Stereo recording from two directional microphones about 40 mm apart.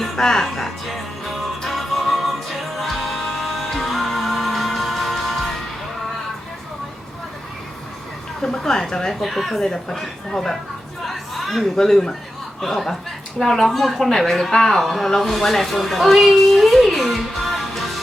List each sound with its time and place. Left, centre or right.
0.0 s music: centre
8.4 s speech: centre
9.2 s speech: centre
11.0 s chatter: centre
11.8 s a woman's voice: centre
14.1 s speech: centre
14.8 s speech: centre